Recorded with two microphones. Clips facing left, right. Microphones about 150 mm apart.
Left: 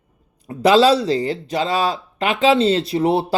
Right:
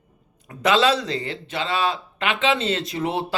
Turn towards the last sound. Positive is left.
turn(degrees=35)  # may be behind; listen again after turning